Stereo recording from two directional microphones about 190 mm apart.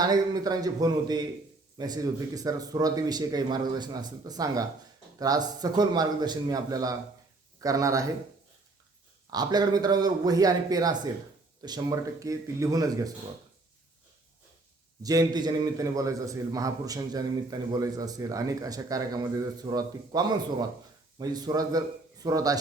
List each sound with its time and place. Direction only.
0.0 s a man's voice: 20° right (ahead or behind)
9.3 s a man's voice: 20° right (ahead or behind)
15.0 s a man's voice: 20° right (ahead or behind)